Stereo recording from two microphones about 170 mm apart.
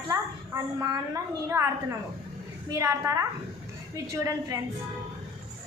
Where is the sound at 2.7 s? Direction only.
15° right (ahead or behind).